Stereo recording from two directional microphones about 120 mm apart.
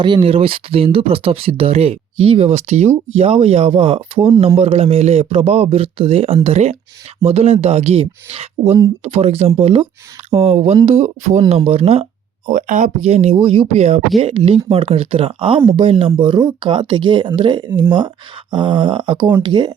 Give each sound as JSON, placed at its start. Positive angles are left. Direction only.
{"t": 0.0, "sound": "speech", "side_deg": -45}
{"t": 9.6, "sound": "speech", "side_deg": -50}
{"t": 11.0, "sound": "speech", "side_deg": -75}
{"t": 12.5, "sound": "speech", "side_deg": -90}
{"t": 13.4, "sound": "speech", "side_deg": -50}
{"t": 14.2, "sound": "speech", "side_deg": -50}